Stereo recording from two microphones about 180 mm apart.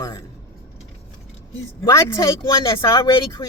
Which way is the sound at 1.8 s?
15° left (ahead or behind).